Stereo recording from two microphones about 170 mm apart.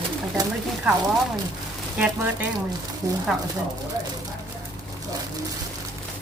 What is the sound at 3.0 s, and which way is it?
Speech, 20° right (ahead or behind).